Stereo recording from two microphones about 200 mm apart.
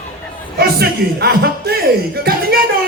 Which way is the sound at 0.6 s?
50° right (ahead or behind).